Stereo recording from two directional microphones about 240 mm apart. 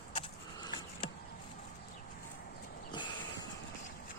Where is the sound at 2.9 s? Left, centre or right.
Centre.